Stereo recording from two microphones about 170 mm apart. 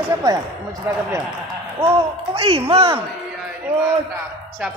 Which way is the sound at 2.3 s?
35° right (ahead or behind).